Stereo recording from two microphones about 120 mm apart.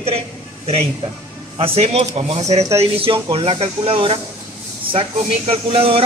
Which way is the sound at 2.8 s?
50° right (ahead or behind).